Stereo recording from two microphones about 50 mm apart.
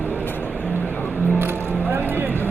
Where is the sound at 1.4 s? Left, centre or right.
Right.